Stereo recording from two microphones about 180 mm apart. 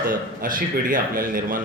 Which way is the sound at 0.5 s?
50° right (ahead or behind).